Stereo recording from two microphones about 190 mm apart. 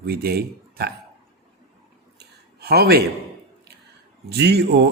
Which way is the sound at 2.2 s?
55° right (ahead or behind).